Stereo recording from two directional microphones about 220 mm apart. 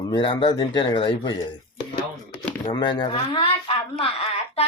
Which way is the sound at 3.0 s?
25° left (ahead or behind).